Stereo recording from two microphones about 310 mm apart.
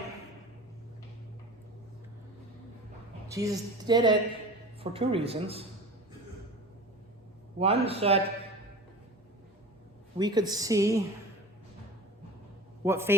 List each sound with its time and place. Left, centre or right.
3.2 s a woman's voice: centre
7.6 s speech: centre
10.2 s a woman's voice: centre
12.8 s a man's voice: centre